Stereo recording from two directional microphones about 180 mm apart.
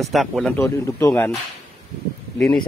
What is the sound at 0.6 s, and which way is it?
Speech, 15° left (ahead or behind).